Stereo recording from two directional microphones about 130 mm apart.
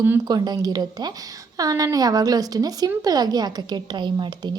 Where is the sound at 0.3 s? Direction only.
30° right (ahead or behind).